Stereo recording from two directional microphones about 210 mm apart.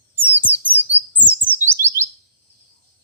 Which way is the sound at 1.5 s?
10° left (ahead or behind).